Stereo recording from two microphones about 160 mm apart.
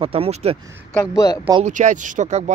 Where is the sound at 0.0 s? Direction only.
35° right (ahead or behind).